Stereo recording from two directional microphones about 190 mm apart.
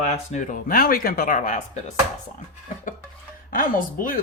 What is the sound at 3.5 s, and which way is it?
Speech, 45° left (ahead or behind).